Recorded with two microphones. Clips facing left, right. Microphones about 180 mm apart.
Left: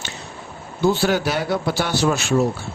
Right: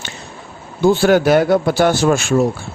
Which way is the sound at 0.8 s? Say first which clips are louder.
Right 6 dB; 50° right (ahead or behind).